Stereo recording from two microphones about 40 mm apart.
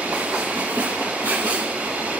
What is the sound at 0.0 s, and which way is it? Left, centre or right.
Train, right.